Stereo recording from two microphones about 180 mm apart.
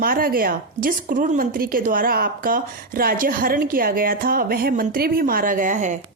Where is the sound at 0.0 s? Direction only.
55° right (ahead or behind).